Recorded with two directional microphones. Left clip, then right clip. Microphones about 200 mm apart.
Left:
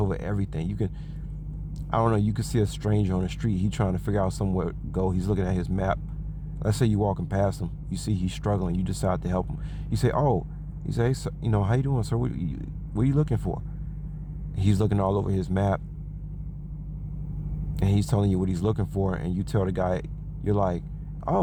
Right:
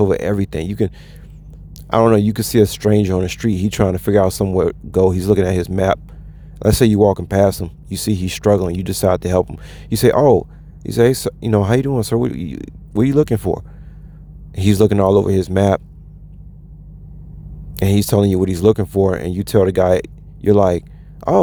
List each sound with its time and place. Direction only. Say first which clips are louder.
0.0 s speech: right 14 dB; 40° right (ahead or behind)
17.7 s speech: right 13 dB; 40° right (ahead or behind)